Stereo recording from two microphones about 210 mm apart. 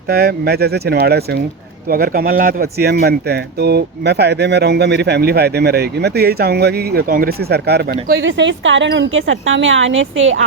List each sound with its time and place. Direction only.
0.1 s speech: 50° right (ahead or behind)
8.2 s speech: 60° right (ahead or behind)